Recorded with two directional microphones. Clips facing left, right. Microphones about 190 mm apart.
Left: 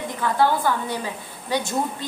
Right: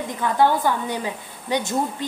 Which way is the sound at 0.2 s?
15° right (ahead or behind).